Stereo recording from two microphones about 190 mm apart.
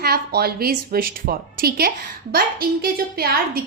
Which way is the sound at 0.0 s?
55° right (ahead or behind).